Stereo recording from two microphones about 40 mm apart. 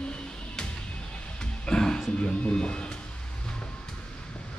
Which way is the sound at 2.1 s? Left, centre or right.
Left.